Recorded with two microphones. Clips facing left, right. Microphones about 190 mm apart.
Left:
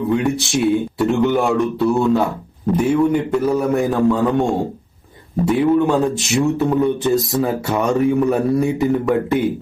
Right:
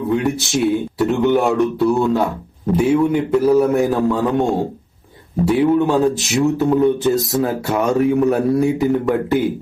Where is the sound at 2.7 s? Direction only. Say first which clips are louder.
Right 1 dB; 5° right (ahead or behind).